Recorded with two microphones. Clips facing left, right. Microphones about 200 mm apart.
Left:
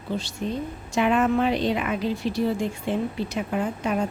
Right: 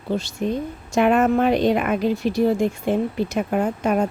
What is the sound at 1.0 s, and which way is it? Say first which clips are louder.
Speech: right 4 dB; 50° right (ahead or behind).